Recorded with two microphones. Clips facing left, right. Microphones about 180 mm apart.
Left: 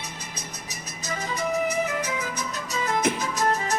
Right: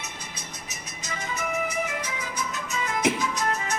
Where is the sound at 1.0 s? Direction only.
40° left (ahead or behind).